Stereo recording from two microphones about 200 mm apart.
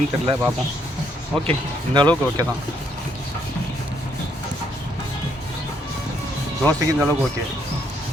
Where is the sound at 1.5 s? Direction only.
25° right (ahead or behind).